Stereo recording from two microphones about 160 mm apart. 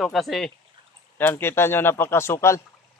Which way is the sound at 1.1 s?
10° left (ahead or behind).